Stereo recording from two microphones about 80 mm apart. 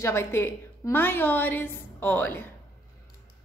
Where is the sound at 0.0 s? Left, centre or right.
Left.